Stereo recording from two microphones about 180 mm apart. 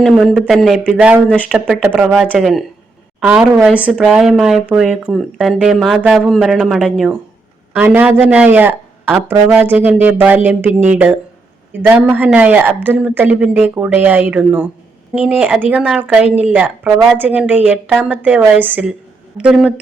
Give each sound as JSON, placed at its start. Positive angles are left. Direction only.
{"t": 0.0, "sound": "a woman's voice", "side_deg": 0}